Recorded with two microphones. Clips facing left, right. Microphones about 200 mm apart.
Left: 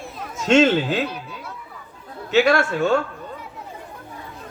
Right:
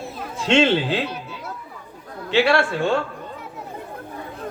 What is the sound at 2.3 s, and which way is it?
Speech, 45° left (ahead or behind).